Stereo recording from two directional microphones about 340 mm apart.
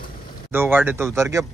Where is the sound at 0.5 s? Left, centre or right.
Centre.